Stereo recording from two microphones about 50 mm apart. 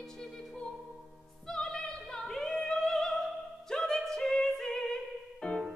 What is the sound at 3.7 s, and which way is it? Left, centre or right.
Music, centre.